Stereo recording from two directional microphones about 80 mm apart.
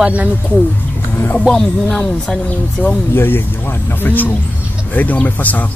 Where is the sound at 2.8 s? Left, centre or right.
Left.